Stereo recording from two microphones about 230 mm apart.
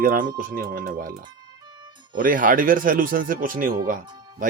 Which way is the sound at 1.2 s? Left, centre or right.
Centre.